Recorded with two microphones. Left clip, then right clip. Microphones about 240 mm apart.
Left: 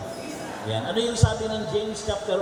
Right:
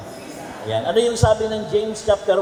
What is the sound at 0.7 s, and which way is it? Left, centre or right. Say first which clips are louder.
A man's voice: right 8 dB; centre.